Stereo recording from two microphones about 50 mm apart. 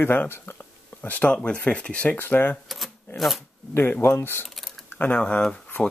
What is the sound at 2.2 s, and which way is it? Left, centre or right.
Speech, left.